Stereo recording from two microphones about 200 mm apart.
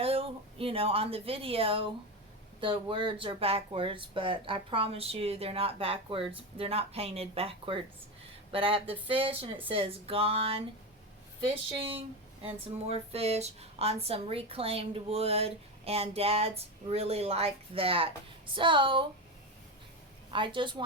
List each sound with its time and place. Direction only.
0.0 s speech: 30° right (ahead or behind)
20.3 s speech: 25° right (ahead or behind)